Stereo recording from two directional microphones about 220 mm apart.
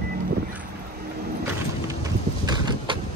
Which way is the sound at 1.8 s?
15° right (ahead or behind).